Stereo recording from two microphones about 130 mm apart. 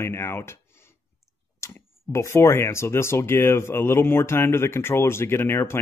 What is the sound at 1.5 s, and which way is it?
Speech, 20° left (ahead or behind).